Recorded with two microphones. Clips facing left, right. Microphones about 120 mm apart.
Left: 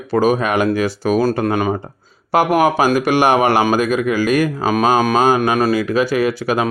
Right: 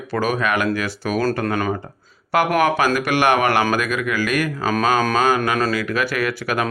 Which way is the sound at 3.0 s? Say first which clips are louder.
Left 4 dB; 30° left (ahead or behind).